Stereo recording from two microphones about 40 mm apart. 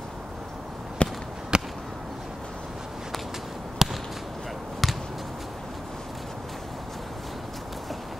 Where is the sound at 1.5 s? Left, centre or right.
Right.